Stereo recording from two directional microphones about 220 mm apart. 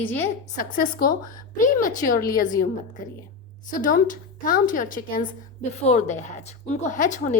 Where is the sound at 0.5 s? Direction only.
40° left (ahead or behind).